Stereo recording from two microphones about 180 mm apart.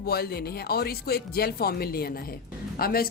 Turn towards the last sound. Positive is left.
turn(degrees=55)  # may be behind; listen again after turning